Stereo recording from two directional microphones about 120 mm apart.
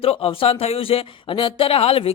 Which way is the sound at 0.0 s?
50° left (ahead or behind).